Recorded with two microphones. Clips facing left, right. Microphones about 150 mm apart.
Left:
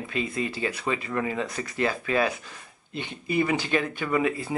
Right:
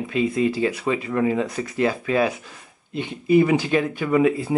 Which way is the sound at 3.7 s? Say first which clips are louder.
Right 5 dB; 15° right (ahead or behind).